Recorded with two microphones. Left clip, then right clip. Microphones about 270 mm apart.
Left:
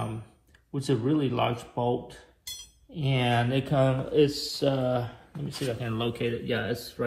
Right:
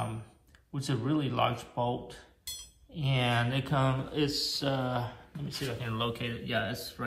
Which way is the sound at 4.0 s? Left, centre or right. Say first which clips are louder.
Left 9 dB; right.